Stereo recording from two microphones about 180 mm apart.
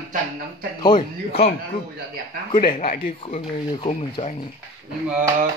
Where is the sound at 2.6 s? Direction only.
35° left (ahead or behind).